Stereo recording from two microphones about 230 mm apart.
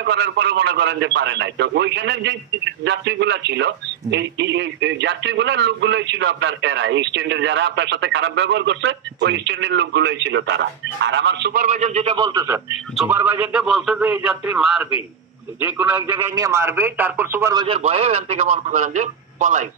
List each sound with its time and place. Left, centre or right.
0.0 s speech: right
11.6 s a man's voice: right; by 17.6 s centre
17.6 s speech: right